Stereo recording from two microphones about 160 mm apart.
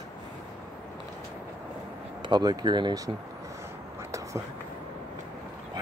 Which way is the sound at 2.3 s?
25° right (ahead or behind).